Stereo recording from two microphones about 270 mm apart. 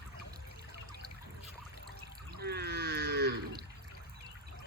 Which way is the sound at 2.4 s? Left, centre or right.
Right.